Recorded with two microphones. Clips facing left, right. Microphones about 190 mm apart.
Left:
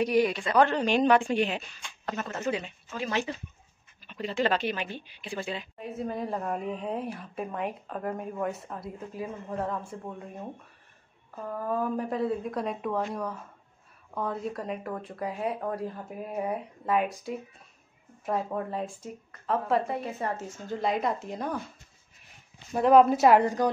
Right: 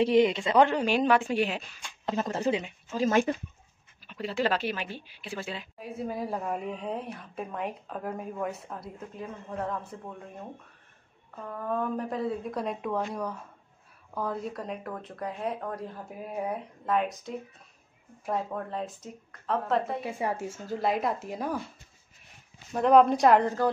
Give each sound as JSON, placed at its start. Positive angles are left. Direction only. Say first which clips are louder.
{"t": 0.0, "sound": "a woman's voice", "louder": "right 2 dB", "side_deg": -25}
{"t": 2.0, "sound": "speech", "louder": "right 4 dB", "side_deg": -30}
{"t": 2.9, "sound": "speech", "louder": "right 6 dB", "side_deg": -40}
{"t": 4.1, "sound": "a woman's voice", "louder": "left 1 dB", "side_deg": -5}
{"t": 11.4, "sound": "a woman's voice", "louder": "left 1 dB", "side_deg": 5}
{"t": 18.2, "sound": "a woman's voice", "louder": "left 2 dB", "side_deg": 5}
{"t": 22.7, "sound": "a woman's voice", "louder": "left 1 dB", "side_deg": 5}